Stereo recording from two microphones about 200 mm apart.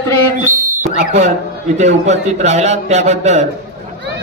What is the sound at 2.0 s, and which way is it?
A man's voice, 35° right (ahead or behind).